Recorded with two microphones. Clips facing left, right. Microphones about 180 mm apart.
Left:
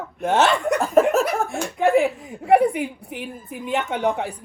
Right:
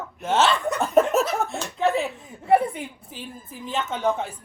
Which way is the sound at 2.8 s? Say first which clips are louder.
Left 7 dB; 65° left (ahead or behind).